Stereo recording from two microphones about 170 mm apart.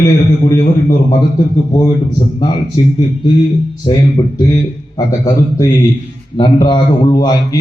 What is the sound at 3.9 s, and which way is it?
A man's voice, 30° left (ahead or behind).